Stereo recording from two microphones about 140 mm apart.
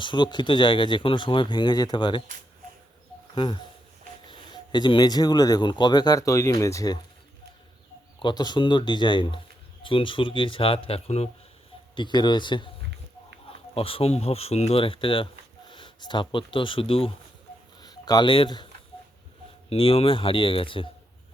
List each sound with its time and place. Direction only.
0.0 s speech: 35° left (ahead or behind)
3.3 s speech: 35° left (ahead or behind)
8.2 s speech: 30° left (ahead or behind); by 11.3 s 45° left (ahead or behind)
11.9 s speech: 30° left (ahead or behind)
13.7 s speech: 40° left (ahead or behind)
17.7 s a sound: 30° left (ahead or behind)
19.7 s speech: 40° left (ahead or behind)